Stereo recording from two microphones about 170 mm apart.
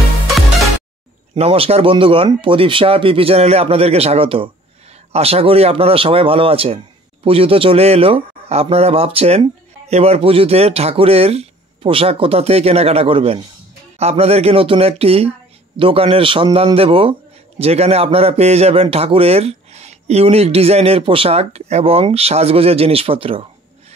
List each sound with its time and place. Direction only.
1.3 s a man's voice: 35° right (ahead or behind)